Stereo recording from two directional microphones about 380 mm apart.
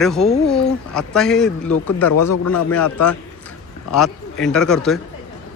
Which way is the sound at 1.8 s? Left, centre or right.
Left.